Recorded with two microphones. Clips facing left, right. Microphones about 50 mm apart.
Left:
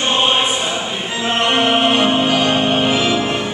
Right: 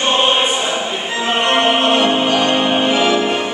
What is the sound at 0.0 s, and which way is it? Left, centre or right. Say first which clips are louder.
Choir: right 1 dB; centre.